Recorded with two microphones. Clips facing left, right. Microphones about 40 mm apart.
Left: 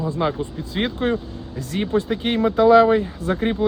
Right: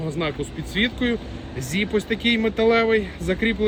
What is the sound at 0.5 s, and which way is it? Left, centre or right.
Speech, right.